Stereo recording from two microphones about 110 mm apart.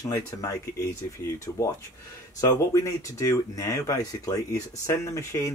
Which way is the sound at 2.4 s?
30° left (ahead or behind).